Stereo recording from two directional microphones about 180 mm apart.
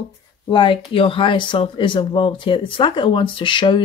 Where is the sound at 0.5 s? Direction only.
30° left (ahead or behind).